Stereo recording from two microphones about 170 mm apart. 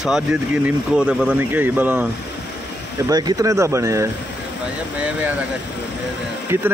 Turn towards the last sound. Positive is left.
turn(degrees=-15)  # may be behind; listen again after turning